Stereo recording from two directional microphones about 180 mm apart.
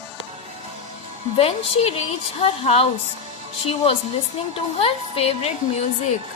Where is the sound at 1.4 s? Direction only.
35° left (ahead or behind).